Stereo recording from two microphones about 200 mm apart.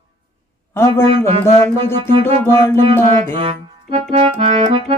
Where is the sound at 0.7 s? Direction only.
15° left (ahead or behind).